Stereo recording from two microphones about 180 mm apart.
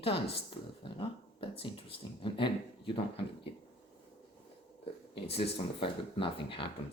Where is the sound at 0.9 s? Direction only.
30° left (ahead or behind).